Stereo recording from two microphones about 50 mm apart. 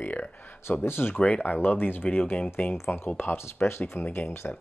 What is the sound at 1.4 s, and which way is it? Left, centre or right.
Speech, left.